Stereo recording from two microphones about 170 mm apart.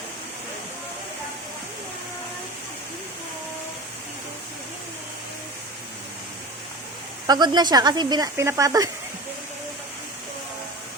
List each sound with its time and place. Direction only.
7.3 s speech: 25° right (ahead or behind)